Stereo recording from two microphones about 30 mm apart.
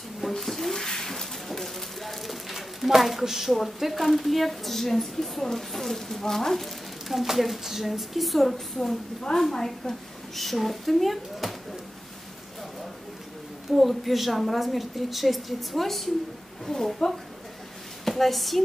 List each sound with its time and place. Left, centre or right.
0.4 s a sound: centre
3.0 s speech: centre
9.3 s a woman's voice: centre
10.4 s speech: centre
13.7 s a woman's voice: centre
18.0 s speech: centre